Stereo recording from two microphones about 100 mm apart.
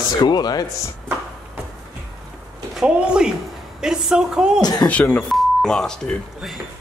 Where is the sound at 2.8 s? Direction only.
10° right (ahead or behind).